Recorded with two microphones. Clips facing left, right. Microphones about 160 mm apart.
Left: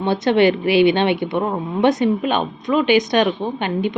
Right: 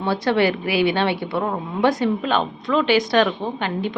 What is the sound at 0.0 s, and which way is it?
A woman's voice, 20° left (ahead or behind).